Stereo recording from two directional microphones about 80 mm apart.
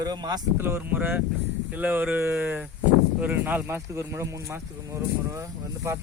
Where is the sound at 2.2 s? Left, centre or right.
Right.